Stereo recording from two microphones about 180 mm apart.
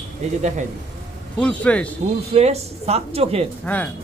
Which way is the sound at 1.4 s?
5° left (ahead or behind).